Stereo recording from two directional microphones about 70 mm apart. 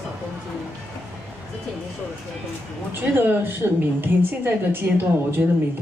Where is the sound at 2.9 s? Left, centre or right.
Right.